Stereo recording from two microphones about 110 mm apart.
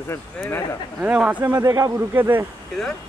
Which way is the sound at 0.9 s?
10° right (ahead or behind).